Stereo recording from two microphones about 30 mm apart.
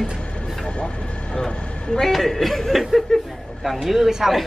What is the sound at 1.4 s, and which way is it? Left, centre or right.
Speech, centre.